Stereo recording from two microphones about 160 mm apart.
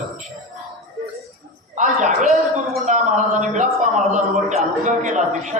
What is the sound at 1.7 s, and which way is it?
Speech, 50° right (ahead or behind).